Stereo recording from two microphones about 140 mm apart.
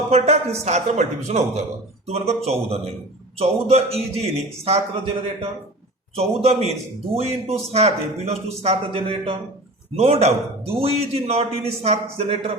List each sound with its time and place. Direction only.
0.1 s a man's voice: 50° right (ahead or behind)